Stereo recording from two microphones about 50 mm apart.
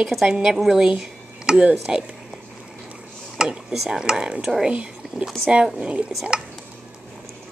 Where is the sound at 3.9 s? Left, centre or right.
Centre.